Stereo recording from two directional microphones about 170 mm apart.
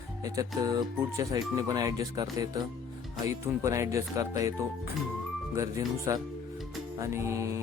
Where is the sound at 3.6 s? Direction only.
15° right (ahead or behind).